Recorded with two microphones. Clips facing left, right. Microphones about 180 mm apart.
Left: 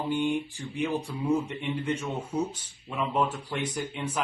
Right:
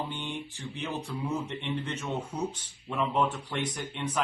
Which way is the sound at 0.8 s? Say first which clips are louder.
Left 5 dB; 10° left (ahead or behind).